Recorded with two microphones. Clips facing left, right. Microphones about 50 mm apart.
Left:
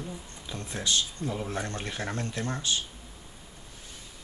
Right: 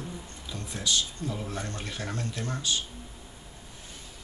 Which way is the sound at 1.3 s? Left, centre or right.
Centre.